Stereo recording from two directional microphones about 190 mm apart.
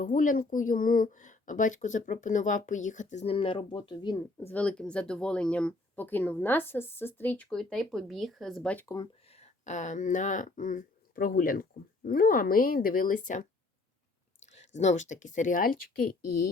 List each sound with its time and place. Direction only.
0.0 s a woman's voice: 45° left (ahead or behind); by 4.2 s 25° left (ahead or behind)
4.4 s speech: 10° left (ahead or behind)
9.3 s speech: 35° left (ahead or behind)